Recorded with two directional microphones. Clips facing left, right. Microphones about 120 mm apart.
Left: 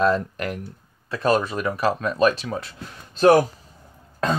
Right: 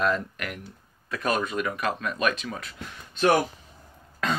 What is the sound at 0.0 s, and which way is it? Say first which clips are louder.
Speech: left 6 dB; 35° left (ahead or behind).